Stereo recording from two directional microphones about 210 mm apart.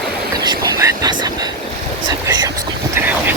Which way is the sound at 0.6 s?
15° right (ahead or behind).